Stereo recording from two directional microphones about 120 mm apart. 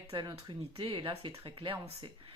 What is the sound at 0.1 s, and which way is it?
Speech, 40° right (ahead or behind).